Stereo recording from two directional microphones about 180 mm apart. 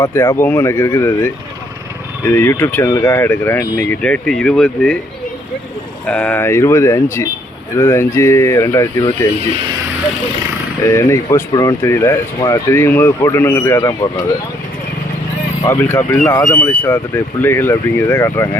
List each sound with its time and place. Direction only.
0.3 s speech: 10° left (ahead or behind)
6.1 s speech: 5° left (ahead or behind)
10.8 s speech: 15° left (ahead or behind)
15.6 s speech: 10° left (ahead or behind)